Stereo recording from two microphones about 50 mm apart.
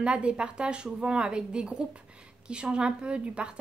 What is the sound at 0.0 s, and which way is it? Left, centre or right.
A woman's voice, right.